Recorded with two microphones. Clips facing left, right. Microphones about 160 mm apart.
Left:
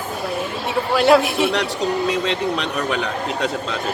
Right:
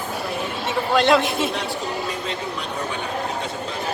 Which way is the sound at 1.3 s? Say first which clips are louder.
Left 4 dB; 75° left (ahead or behind).